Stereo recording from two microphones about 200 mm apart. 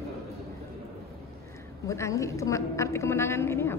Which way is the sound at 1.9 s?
15° left (ahead or behind).